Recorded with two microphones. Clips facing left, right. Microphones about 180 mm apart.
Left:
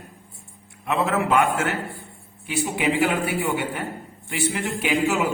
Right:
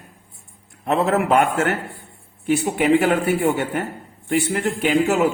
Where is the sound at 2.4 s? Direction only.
50° right (ahead or behind).